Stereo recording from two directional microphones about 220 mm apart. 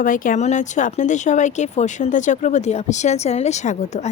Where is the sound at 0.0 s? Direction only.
35° left (ahead or behind).